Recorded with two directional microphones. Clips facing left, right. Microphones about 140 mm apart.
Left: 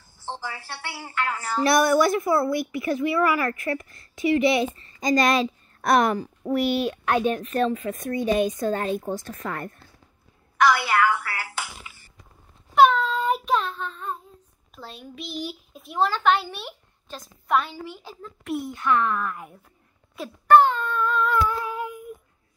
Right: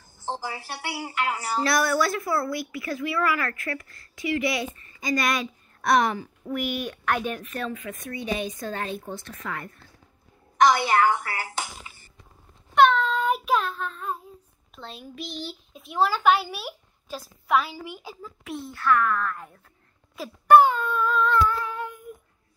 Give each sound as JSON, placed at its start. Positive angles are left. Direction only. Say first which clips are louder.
{"t": 0.3, "sound": "a woman's voice", "louder": "right 2 dB", "side_deg": -15}
{"t": 1.6, "sound": "a woman's voice", "louder": "left 5 dB", "side_deg": 20}
{"t": 5.8, "sound": "speech", "louder": "left 2 dB", "side_deg": 50}
{"t": 6.5, "sound": "speech", "louder": "left 6 dB", "side_deg": 30}
{"t": 8.0, "sound": "a woman's voice", "louder": "left 8 dB", "side_deg": 45}
{"t": 10.6, "sound": "a woman's voice", "louder": "right 1 dB", "side_deg": -20}
{"t": 11.2, "sound": "speech", "louder": "right 1 dB", "side_deg": -40}
{"t": 12.7, "sound": "a sound", "louder": "left 1 dB", "side_deg": 5}
{"t": 14.8, "sound": "a child's voice", "louder": "even", "side_deg": 0}
{"t": 18.5, "sound": "speech", "louder": "left 1 dB", "side_deg": 15}
{"t": 20.4, "sound": "child singing", "louder": "even", "side_deg": -10}
{"t": 21.3, "sound": "humming", "louder": "right 1 dB", "side_deg": 10}